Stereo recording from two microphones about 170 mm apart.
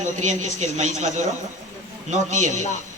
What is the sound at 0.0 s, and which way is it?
A man's voice, 45° right (ahead or behind).